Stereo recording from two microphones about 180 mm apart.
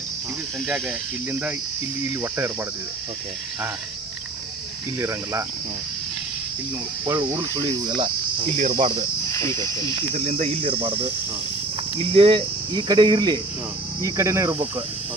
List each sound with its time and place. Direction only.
0.7 s speech: 5° right (ahead or behind)
4.9 s speech: 15° right (ahead or behind)
7.0 s cricket: 15° right (ahead or behind)
9.3 s speech: 15° left (ahead or behind)
10.2 s speech: 35° right (ahead or behind)
12.1 s cricket: 30° right (ahead or behind)
14.0 s speech: 15° right (ahead or behind)